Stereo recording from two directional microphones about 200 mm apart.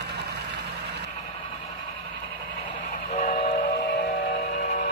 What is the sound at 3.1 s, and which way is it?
Train, 35° left (ahead or behind).